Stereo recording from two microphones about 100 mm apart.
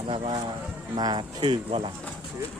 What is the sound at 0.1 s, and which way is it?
Speech, 60° right (ahead or behind).